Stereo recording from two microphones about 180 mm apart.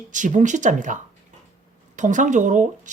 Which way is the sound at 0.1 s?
45° right (ahead or behind).